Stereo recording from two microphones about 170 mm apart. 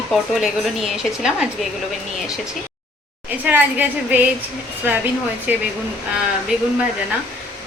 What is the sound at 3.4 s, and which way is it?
Speech, 10° right (ahead or behind).